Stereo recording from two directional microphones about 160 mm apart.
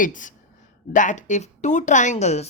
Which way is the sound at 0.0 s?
55° left (ahead or behind).